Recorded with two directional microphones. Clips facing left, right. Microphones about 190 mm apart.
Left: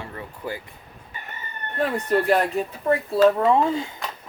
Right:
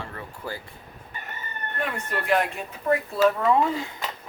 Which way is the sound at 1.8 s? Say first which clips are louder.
Left 8 dB; 35° left (ahead or behind).